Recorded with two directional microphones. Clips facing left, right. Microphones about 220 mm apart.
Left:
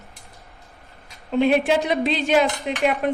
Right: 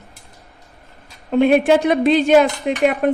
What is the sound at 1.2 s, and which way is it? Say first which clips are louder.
A woman's voice: right 5 dB; 50° right (ahead or behind).